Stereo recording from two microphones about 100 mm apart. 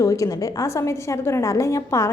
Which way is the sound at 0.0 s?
35° left (ahead or behind).